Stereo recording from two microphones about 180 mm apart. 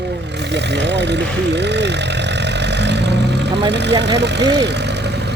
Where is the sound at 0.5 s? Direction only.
75° right (ahead or behind).